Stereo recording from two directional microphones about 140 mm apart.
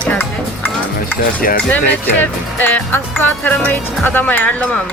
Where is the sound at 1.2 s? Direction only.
90° left.